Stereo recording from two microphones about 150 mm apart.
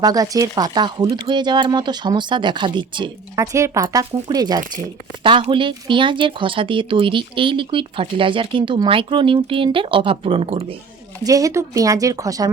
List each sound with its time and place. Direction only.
0.0 s speech: 25° right (ahead or behind)
3.3 s speech: 20° right (ahead or behind); by 10.8 s 40° right (ahead or behind)
11.3 s speech: 20° right (ahead or behind)